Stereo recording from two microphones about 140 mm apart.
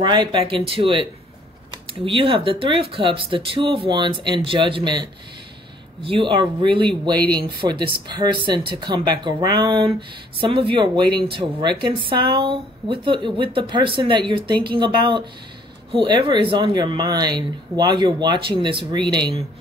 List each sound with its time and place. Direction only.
0.0 s speech: 35° right (ahead or behind)
6.0 s speech: 40° right (ahead or behind)